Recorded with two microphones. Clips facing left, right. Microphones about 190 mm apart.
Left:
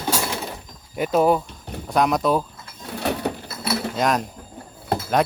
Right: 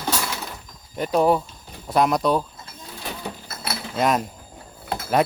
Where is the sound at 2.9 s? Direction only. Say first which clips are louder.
Left 9 dB; 70° left (ahead or behind).